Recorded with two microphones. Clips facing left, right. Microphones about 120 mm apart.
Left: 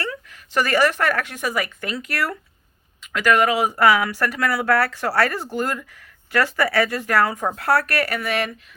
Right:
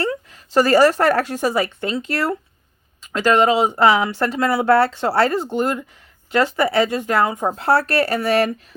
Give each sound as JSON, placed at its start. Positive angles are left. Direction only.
{"t": 0.0, "sound": "a woman's voice", "side_deg": -30}